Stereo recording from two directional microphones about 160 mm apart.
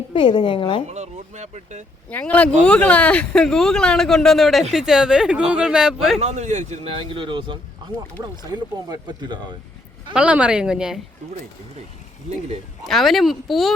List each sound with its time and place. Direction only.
0.1 s a woman's voice: 30° left (ahead or behind)
0.9 s speech: 45° right (ahead or behind)
2.0 s speech: 10° left (ahead or behind)
6.1 s speech: 45° right (ahead or behind); by 9.4 s 30° right (ahead or behind)
10.2 s speech: 5° right (ahead or behind)
12.8 s speech: centre (ahead or behind)